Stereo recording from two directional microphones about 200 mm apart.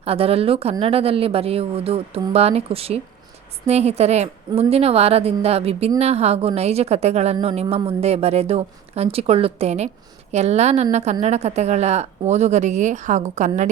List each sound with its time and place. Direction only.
0.0 s speech: 30° right (ahead or behind)